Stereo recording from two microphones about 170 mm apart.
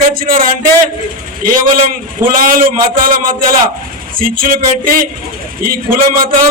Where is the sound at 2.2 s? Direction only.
55° right (ahead or behind).